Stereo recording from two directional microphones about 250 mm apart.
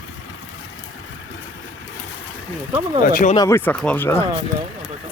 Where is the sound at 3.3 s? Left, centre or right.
Centre.